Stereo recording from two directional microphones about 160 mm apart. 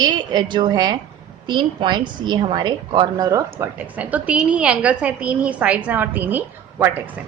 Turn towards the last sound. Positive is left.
turn(degrees=-10)  # may be behind; listen again after turning